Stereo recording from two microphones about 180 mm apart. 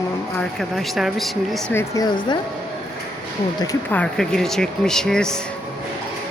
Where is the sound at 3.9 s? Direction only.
5° left (ahead or behind).